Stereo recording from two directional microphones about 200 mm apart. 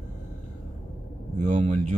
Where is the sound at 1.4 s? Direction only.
35° right (ahead or behind).